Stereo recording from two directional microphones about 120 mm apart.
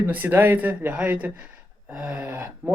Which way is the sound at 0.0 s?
15° right (ahead or behind).